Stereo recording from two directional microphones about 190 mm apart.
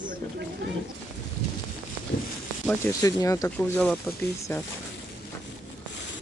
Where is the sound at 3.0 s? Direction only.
20° left (ahead or behind).